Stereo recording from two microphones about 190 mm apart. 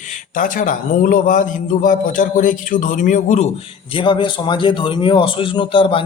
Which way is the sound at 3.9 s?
25° left (ahead or behind).